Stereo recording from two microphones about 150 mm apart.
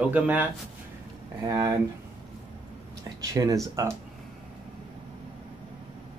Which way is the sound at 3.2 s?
25° right (ahead or behind).